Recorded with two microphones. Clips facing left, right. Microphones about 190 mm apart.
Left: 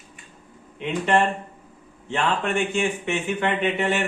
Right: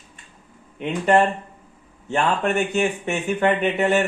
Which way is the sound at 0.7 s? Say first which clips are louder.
Right 3 dB; 40° right (ahead or behind).